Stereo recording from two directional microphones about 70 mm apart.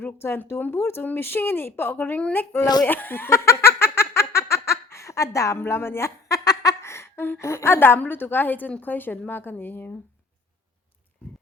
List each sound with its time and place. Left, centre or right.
0.0 s a woman's voice: left
2.8 s giggle: left
5.5 s speech: left
6.2 s giggle: left
6.8 s a sound: left
7.3 s a woman's voice: left